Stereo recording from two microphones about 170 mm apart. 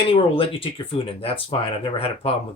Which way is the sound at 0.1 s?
30° left (ahead or behind).